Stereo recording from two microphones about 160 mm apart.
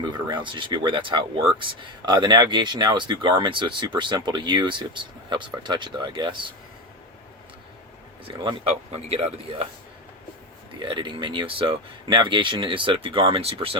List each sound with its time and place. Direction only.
0.3 s speech: 30° right (ahead or behind)
8.4 s speech: 40° right (ahead or behind)
10.8 s speech: 30° right (ahead or behind)